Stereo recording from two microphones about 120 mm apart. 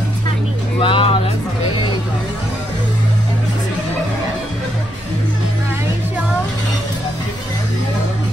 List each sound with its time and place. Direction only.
0.7 s music: 50° left (ahead or behind)